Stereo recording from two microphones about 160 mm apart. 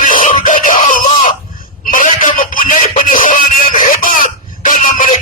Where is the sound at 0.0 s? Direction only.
55° left (ahead or behind).